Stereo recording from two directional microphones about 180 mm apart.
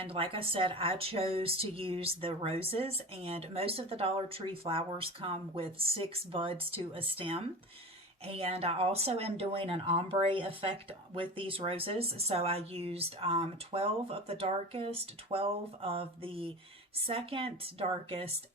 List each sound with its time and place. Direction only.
0.0 s speech: 30° right (ahead or behind)